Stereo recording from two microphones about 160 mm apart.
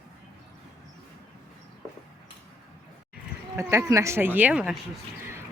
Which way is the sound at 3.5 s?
15° right (ahead or behind).